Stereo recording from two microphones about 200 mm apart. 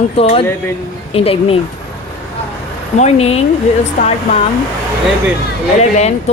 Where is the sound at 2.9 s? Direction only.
35° left (ahead or behind).